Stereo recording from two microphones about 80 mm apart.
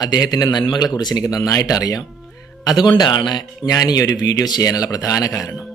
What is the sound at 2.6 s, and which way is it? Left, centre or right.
Speech, left.